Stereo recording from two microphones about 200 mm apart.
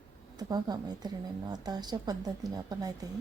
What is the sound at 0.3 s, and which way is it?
A woman's voice, 20° right (ahead or behind).